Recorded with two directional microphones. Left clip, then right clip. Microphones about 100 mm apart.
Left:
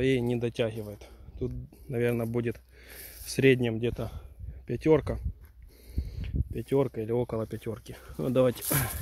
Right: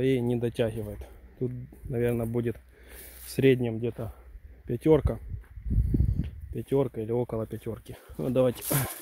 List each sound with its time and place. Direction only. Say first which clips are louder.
0.0 s speech: right 1 dB; 15° right (ahead or behind)
0.5 s speech: right 1 dB; 35° right (ahead or behind)
0.9 s a sound: right 2 dB; 45° right (ahead or behind)
1.9 s speech: even; 15° right (ahead or behind)
2.3 s a sound: right 1 dB; 15° right (ahead or behind)
3.6 s speech: left 1 dB; 20° left (ahead or behind)
4.6 s speech: right 1 dB; 30° right (ahead or behind)
6.2 s a sound: left 1 dB; 15° right (ahead or behind)
6.9 s speech: even; 5° right (ahead or behind)
8.0 s speech: even; centre (ahead or behind)
8.6 s speech: even; 15° right (ahead or behind)